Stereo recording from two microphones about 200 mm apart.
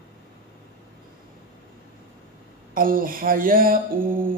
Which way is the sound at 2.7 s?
45° right (ahead or behind).